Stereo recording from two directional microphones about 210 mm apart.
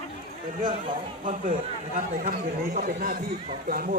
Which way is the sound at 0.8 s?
35° right (ahead or behind).